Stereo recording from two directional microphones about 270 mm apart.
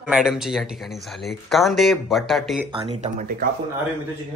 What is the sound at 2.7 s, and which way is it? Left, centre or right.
Speech, right.